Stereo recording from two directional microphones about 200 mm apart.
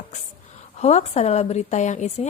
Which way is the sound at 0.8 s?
35° left (ahead or behind).